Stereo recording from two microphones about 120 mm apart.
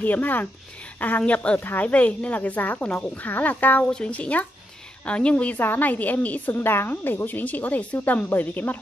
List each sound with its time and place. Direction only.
0.0 s a woman's voice: 15° left (ahead or behind)